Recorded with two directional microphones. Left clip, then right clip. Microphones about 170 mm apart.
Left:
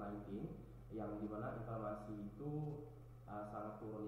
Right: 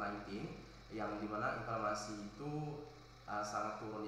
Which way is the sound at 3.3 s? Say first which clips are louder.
Right 8 dB; 25° right (ahead or behind).